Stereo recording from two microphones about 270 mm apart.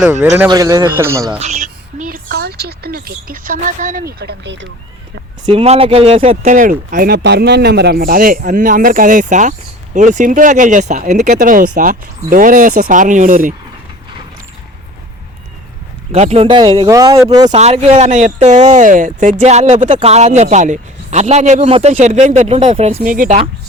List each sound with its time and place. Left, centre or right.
0.0 s a man's voice: centre
1.4 s speech: right
4.2 s speech: right
5.5 s speech: right
16.1 s a man's voice: right